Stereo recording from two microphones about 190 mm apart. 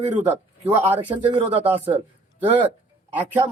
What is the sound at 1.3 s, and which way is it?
Speech, 35° right (ahead or behind).